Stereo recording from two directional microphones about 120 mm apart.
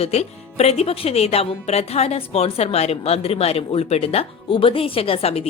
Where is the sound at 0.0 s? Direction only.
60° left (ahead or behind).